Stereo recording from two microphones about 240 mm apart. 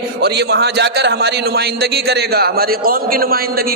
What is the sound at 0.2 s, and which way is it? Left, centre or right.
A man's voice, right.